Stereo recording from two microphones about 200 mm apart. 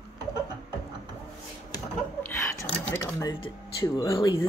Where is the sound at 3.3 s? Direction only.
20° left (ahead or behind).